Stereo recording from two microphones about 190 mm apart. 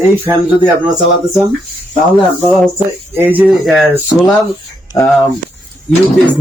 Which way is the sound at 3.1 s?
10° right (ahead or behind).